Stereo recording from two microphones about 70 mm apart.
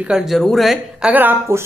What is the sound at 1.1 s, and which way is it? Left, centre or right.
Speech, right.